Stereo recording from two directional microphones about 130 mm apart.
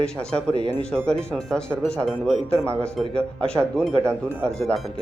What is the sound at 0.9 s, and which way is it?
Speech, 5° left (ahead or behind).